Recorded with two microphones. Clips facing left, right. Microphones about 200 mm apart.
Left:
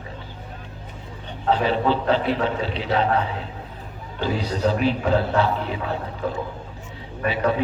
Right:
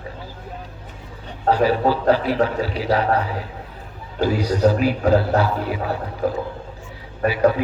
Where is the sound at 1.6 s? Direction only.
25° left (ahead or behind).